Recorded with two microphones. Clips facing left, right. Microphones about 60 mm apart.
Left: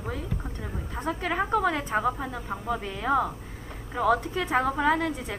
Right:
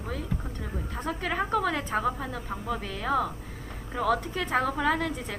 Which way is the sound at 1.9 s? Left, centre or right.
Centre.